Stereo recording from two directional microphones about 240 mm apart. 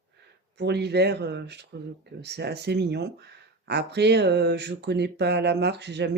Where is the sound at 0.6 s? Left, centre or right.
Right.